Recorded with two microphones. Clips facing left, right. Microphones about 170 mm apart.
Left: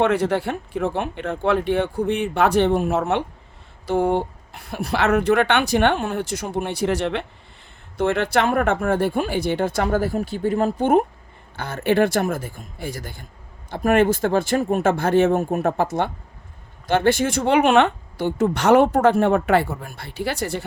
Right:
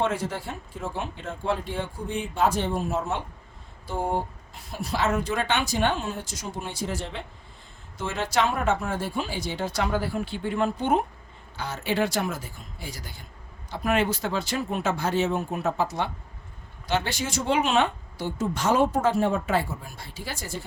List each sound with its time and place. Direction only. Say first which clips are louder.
0.0 s speech: left 8 dB; 65° left (ahead or behind)
7.9 s speech: left 7 dB; 60° left (ahead or behind)